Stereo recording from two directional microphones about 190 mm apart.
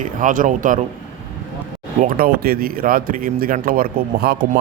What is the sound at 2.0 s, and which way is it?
Speech, 50° right (ahead or behind).